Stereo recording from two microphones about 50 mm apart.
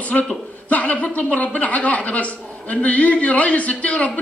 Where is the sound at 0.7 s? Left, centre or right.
Left.